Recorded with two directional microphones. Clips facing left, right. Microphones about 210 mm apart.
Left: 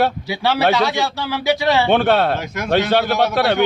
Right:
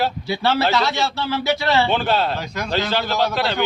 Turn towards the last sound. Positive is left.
turn(degrees=60)  # may be behind; listen again after turning